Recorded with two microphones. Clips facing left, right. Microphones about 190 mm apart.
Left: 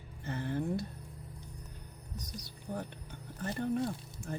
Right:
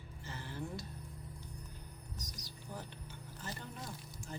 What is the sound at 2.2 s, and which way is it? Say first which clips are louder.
Speech: left 8 dB; 60° left (ahead or behind).